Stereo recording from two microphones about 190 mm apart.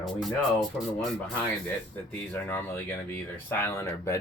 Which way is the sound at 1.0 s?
5° left (ahead or behind).